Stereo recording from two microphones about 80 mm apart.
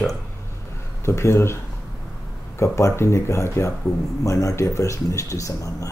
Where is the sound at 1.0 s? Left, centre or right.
Left.